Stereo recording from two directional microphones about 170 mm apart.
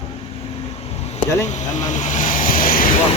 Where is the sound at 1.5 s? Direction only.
45° left (ahead or behind).